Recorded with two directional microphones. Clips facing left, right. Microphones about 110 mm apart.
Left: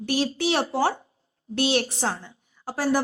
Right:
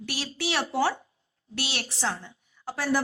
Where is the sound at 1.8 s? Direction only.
45° left (ahead or behind).